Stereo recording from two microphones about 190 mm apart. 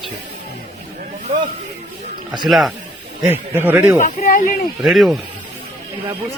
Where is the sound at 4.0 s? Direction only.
45° left (ahead or behind).